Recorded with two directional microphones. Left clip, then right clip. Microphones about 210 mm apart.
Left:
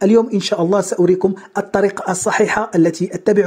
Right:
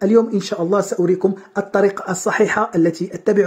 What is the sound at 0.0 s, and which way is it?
Speech, 30° left (ahead or behind).